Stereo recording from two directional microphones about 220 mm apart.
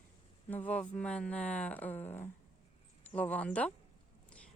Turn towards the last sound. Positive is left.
turn(degrees=5)  # may be behind; listen again after turning